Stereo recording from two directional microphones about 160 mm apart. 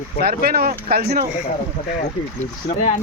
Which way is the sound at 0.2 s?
75° right (ahead or behind).